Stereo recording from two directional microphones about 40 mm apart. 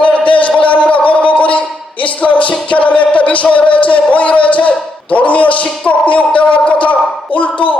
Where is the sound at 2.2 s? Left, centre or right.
Left.